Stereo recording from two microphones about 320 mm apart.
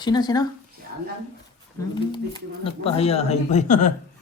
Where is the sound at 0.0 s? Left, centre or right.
Centre.